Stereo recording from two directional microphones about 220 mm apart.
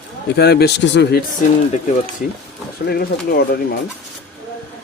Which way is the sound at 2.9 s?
45° left (ahead or behind).